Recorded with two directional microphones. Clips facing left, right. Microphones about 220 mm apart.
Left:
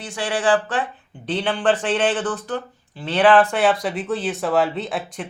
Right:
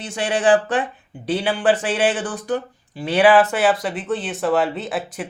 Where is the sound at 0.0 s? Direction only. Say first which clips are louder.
Right 3 dB; 20° right (ahead or behind).